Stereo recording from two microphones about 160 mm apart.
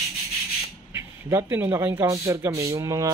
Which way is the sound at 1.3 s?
15° right (ahead or behind).